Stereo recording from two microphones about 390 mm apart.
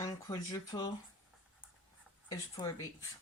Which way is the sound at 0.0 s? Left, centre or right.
Centre.